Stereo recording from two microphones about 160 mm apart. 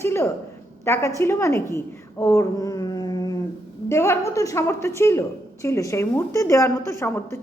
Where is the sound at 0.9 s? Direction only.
15° left (ahead or behind).